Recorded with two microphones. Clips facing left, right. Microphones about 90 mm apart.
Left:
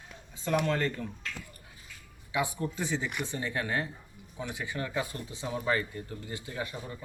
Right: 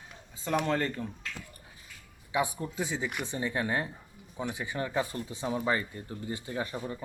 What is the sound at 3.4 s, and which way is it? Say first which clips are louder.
Speech: right 2 dB; 20° right (ahead or behind).